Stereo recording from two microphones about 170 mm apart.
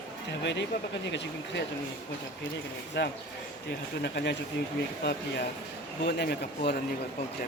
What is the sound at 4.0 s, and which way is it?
Speech, 75° left (ahead or behind).